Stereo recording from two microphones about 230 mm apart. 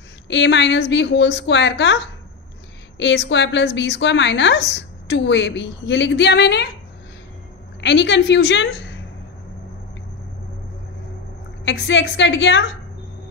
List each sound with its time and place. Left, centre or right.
0.3 s a woman's voice: left
7.8 s a woman's voice: left
11.6 s a woman's voice: left